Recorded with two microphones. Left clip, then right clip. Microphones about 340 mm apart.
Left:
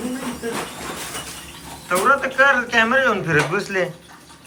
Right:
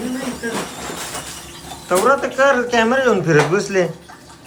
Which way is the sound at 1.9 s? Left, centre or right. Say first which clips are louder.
Right 2 dB; centre.